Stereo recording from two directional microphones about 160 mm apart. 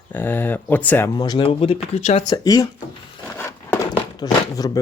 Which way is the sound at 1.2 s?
30° left (ahead or behind).